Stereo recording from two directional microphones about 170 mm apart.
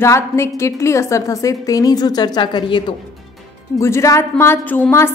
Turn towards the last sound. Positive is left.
turn(degrees=15)  # may be behind; listen again after turning